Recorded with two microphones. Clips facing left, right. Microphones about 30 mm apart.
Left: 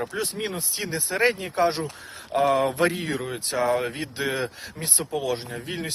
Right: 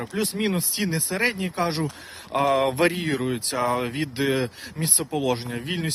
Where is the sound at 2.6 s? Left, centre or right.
Right.